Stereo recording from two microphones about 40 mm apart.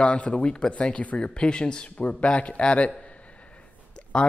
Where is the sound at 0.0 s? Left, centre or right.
Left.